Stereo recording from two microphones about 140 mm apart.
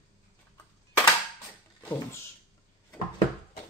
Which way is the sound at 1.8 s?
15° left (ahead or behind).